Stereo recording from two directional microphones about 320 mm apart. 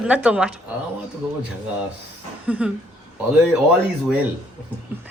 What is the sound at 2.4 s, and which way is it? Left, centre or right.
Speech, centre.